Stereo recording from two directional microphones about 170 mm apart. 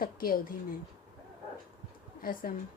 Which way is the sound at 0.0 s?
60° left (ahead or behind).